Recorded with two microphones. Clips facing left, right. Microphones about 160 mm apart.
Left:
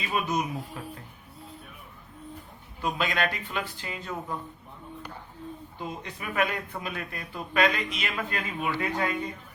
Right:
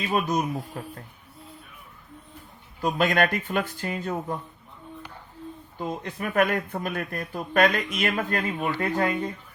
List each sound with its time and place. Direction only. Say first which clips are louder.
0.1 s speech: right 3 dB; 40° right (ahead or behind)
2.8 s a man's voice: right 5 dB; 50° right (ahead or behind)
6.0 s a man's voice: right 5 dB; 50° right (ahead or behind)